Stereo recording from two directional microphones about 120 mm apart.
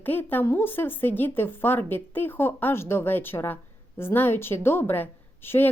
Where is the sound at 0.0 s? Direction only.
15° left (ahead or behind).